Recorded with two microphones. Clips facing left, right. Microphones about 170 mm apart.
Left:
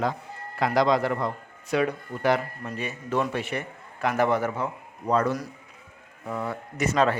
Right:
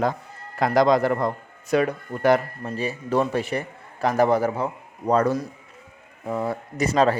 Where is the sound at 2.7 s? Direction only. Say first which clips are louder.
Right 5 dB; 35° right (ahead or behind).